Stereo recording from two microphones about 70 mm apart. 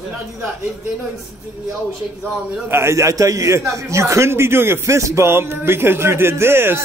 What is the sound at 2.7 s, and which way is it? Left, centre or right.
A man's voice, right.